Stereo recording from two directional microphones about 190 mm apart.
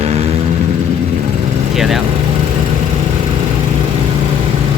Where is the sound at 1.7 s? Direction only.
Centre (ahead or behind).